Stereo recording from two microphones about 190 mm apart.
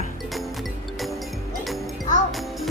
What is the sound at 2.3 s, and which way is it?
Music, centre (ahead or behind).